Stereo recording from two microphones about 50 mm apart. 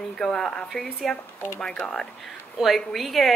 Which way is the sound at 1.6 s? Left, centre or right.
Left.